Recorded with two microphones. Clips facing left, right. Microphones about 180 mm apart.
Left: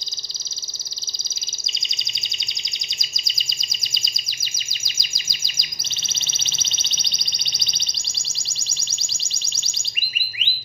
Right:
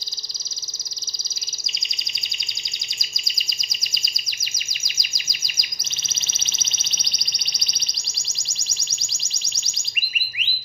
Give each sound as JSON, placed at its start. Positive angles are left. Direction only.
{"t": 3.0, "sound": "bird vocalization", "side_deg": 25}
{"t": 4.6, "sound": "chirp", "side_deg": 30}
{"t": 9.2, "sound": "music", "side_deg": 30}